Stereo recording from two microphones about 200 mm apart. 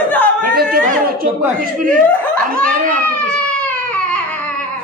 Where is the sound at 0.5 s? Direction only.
50° right (ahead or behind).